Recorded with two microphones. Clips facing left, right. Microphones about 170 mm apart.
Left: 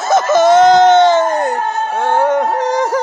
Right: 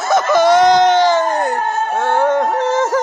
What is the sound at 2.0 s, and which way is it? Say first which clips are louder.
Music: left 2 dB; 15° left (ahead or behind).